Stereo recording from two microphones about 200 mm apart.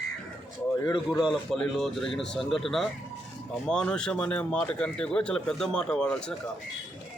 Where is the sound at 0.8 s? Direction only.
15° left (ahead or behind).